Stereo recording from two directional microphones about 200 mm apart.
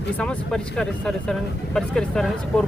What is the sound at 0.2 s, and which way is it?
Speech, 5° left (ahead or behind).